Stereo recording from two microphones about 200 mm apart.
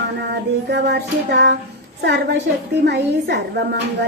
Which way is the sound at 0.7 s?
60° right (ahead or behind).